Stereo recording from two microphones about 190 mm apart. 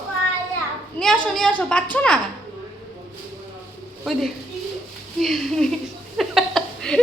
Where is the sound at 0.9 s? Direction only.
Centre (ahead or behind).